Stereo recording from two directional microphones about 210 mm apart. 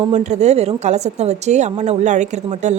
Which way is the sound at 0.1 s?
35° right (ahead or behind).